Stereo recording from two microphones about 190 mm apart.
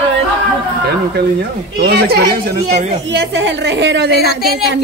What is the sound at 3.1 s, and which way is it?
A woman's voice, 70° right (ahead or behind).